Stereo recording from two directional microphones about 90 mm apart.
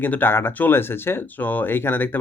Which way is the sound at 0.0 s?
20° left (ahead or behind).